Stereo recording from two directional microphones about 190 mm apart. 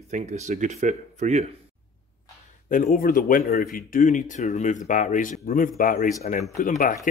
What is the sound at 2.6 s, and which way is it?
A man's voice, 45° left (ahead or behind).